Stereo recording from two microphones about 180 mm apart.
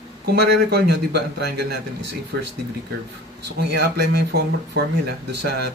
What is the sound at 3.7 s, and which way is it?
A man's voice, 65° right (ahead or behind).